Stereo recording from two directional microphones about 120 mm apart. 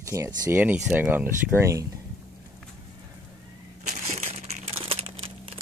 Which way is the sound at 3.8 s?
85° right.